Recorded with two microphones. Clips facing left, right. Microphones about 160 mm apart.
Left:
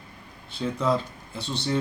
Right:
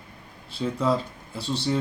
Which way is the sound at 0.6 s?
15° right (ahead or behind).